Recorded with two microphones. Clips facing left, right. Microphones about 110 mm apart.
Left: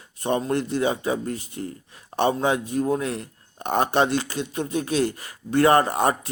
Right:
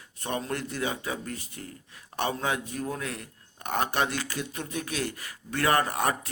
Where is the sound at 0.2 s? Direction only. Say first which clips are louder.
Left 8 dB; 25° left (ahead or behind).